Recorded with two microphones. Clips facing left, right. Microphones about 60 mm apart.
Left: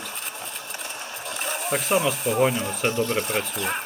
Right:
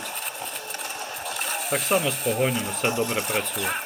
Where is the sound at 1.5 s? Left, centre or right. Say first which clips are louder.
Left 1 dB; centre.